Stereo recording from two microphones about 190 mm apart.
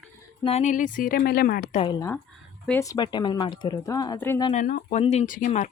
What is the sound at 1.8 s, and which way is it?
Speech, 25° left (ahead or behind).